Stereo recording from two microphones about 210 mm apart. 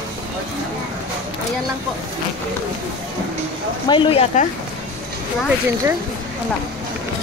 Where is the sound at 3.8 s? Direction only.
25° left (ahead or behind).